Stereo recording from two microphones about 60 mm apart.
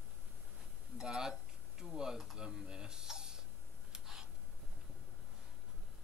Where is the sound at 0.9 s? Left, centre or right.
Centre.